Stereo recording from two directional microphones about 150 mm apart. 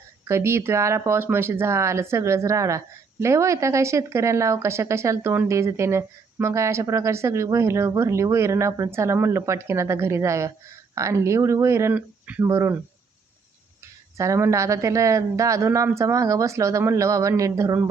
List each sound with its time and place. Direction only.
0.3 s speech: 15° right (ahead or behind)
14.2 s speech: 20° right (ahead or behind)